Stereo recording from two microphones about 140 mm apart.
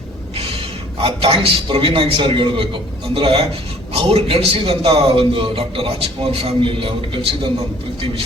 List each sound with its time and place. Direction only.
1.0 s a man's voice: 40° right (ahead or behind)